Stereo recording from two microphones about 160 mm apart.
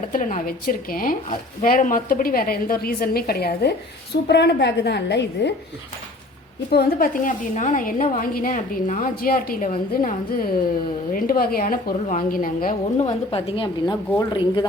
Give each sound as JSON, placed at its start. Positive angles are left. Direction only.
{"t": 0.1, "sound": "a woman's voice", "side_deg": 55}
{"t": 6.7, "sound": "a woman's voice", "side_deg": 75}
{"t": 13.0, "sound": "a woman's voice", "side_deg": 40}